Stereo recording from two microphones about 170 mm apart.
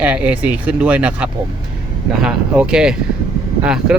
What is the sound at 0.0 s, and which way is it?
Speech, 10° right (ahead or behind).